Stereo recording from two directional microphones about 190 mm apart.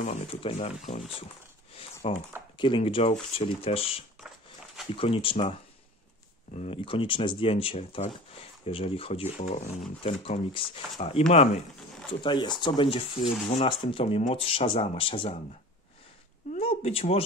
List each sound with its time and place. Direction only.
0.0 s speech: 35° left (ahead or behind)
4.2 s dog: 5° right (ahead or behind)
4.9 s speech: 30° left (ahead or behind)
6.5 s speech: 30° left (ahead or behind)
16.5 s a sound: 30° left (ahead or behind)